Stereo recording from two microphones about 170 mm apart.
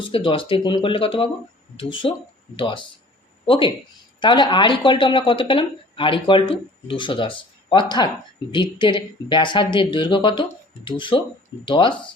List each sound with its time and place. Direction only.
0.0 s speech: 30° left (ahead or behind)